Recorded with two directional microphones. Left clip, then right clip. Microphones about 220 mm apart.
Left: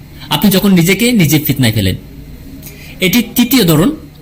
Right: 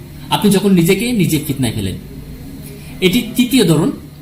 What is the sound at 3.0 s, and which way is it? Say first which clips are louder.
Speech: left 2 dB; 40° left (ahead or behind).